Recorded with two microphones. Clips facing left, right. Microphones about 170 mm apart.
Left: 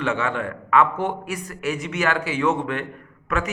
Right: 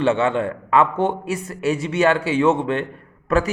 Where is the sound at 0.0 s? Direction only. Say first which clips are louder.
Right 6 dB; 30° right (ahead or behind).